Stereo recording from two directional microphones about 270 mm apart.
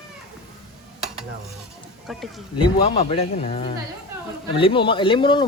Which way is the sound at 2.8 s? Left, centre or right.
Left.